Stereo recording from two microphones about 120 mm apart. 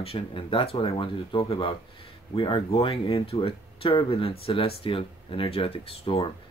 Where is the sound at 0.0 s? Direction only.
50° left (ahead or behind).